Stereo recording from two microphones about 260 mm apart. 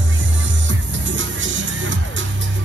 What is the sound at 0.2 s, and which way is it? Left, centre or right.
Music, right.